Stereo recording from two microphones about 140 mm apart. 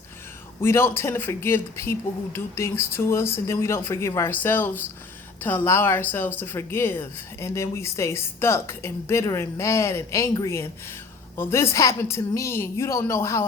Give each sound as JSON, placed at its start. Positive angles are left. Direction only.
{"t": 0.6, "sound": "a woman's voice", "side_deg": 15}